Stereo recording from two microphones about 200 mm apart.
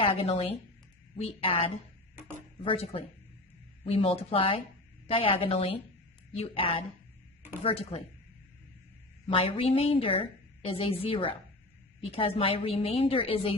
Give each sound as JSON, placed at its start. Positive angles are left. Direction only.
{"t": 0.0, "sound": "a woman's voice", "side_deg": 30}
{"t": 9.2, "sound": "a woman's voice", "side_deg": 30}